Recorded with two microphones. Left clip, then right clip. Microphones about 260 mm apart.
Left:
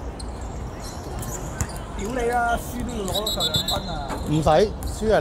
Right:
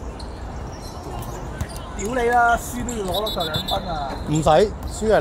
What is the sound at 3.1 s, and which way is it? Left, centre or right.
Speech, centre.